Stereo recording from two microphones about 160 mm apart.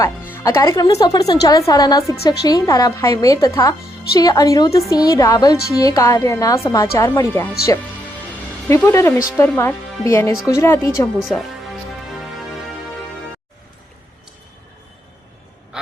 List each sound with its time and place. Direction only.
0.0 s a woman's voice: 15° left (ahead or behind)
8.6 s a woman's voice: 15° left (ahead or behind)
11.2 s music: 5° right (ahead or behind)